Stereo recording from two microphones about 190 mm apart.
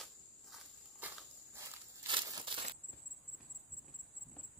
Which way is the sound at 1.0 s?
10° right (ahead or behind).